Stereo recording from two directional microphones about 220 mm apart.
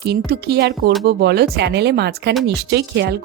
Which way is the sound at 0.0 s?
45° right (ahead or behind).